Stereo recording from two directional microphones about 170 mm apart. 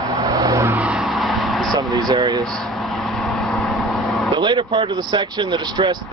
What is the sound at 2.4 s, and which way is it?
Vehicle, 5° left (ahead or behind).